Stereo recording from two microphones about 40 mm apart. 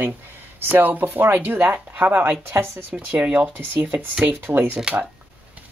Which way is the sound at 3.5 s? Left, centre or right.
Right.